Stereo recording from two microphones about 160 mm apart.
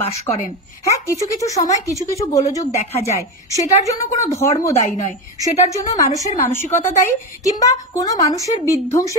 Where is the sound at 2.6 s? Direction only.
45° left (ahead or behind).